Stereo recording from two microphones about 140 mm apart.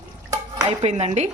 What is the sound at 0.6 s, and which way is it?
Speech, 50° right (ahead or behind).